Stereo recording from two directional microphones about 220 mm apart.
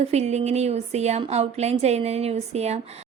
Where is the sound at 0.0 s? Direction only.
30° right (ahead or behind).